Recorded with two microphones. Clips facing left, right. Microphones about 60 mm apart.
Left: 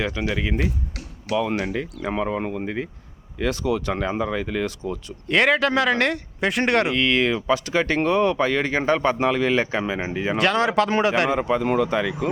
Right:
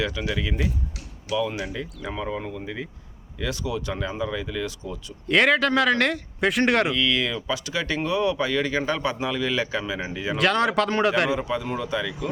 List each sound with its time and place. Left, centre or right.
0.0 s speech: left
0.9 s speech: left
5.3 s speech: centre
6.9 s speech: left
10.3 s speech: centre
11.6 s speech: left